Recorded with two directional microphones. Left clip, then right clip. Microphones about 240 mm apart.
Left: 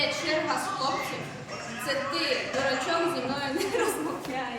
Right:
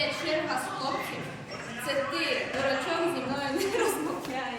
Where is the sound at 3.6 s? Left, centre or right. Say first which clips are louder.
Even; centre.